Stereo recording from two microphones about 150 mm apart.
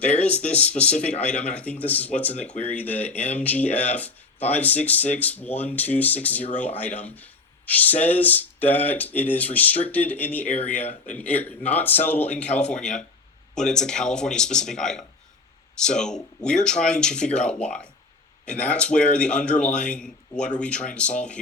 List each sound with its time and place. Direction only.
0.0 s a man's voice: 10° left (ahead or behind)
10.8 s speech: 55° left (ahead or behind)
11.2 s a man's voice: 10° left (ahead or behind)